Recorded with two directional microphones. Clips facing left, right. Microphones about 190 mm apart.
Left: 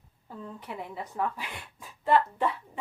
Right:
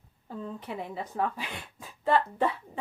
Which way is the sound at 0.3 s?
30° right (ahead or behind).